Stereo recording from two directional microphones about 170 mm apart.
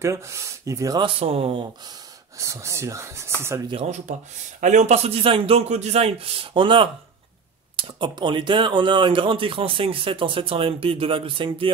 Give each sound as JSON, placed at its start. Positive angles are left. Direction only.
{"t": 0.0, "sound": "speech", "side_deg": -15}
{"t": 1.0, "sound": "speech", "side_deg": -35}
{"t": 2.3, "sound": "speech", "side_deg": -15}
{"t": 3.7, "sound": "speech", "side_deg": -45}